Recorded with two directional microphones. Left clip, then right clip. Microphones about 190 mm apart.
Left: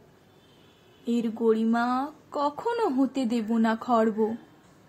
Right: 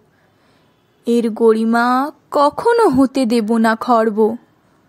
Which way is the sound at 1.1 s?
55° right (ahead or behind).